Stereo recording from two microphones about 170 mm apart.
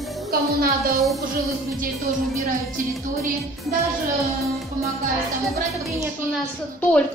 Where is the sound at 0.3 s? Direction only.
60° right (ahead or behind).